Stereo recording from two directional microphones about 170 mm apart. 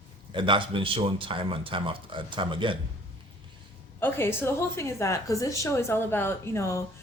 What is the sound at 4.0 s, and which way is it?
A woman's voice, 15° left (ahead or behind).